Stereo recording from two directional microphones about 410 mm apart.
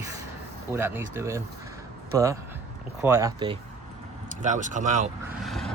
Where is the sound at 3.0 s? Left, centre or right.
Centre.